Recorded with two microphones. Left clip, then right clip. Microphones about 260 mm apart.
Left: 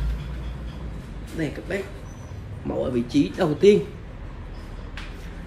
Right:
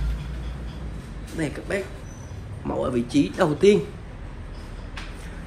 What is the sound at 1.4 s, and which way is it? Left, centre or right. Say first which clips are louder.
Speech: right 1 dB; centre.